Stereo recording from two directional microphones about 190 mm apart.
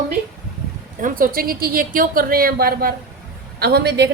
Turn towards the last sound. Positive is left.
turn(degrees=-60)  # may be behind; listen again after turning